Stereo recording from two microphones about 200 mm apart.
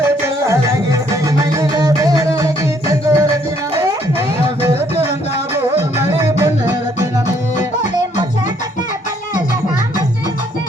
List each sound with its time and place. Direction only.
1.1 s music: 15° right (ahead or behind)
6.0 s music: 10° right (ahead or behind)